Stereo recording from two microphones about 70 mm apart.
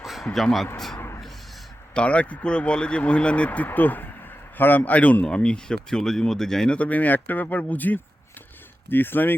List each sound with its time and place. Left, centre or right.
0.0 s a sound: centre
0.3 s speech: centre
0.9 s a sound: left
1.9 s a man's voice: centre
5.2 s speech: centre
6.7 s speech: left